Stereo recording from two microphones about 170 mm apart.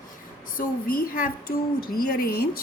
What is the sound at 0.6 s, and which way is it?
Speech, 55° left (ahead or behind).